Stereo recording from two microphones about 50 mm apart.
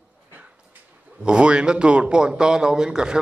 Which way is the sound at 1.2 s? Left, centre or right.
Centre.